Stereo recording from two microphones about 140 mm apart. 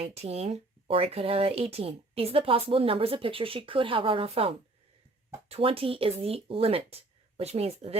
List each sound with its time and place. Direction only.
0.0 s speech: 50° right (ahead or behind)